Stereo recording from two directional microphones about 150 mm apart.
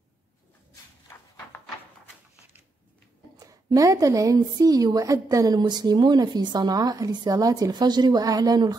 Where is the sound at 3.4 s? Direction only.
25° right (ahead or behind).